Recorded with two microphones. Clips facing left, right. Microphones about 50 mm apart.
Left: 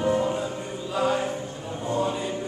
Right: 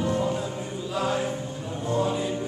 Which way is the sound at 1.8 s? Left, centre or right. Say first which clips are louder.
Right 1 dB; centre.